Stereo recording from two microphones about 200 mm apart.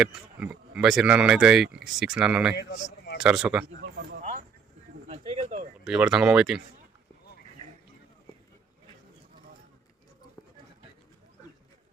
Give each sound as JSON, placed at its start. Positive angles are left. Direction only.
{"t": 0.0, "sound": "speech", "side_deg": -5}
{"t": 2.6, "sound": "speech", "side_deg": 60}
{"t": 3.2, "sound": "speech", "side_deg": -5}
{"t": 3.8, "sound": "a sound", "side_deg": -50}
{"t": 5.0, "sound": "a sound", "side_deg": -35}
{"t": 5.8, "sound": "speech", "side_deg": -5}